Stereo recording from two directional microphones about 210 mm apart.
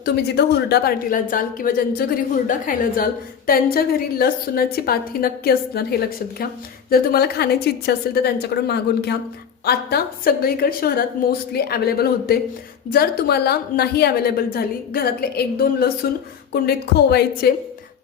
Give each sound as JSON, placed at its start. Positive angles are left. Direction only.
{"t": 0.0, "sound": "a woman's voice", "side_deg": 50}
{"t": 6.9, "sound": "a woman's voice", "side_deg": 45}